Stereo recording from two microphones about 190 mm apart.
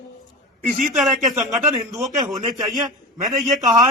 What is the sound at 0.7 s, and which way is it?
Speech, 40° right (ahead or behind).